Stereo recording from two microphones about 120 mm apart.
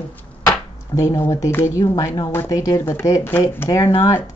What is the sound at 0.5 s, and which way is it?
Speech, 25° left (ahead or behind).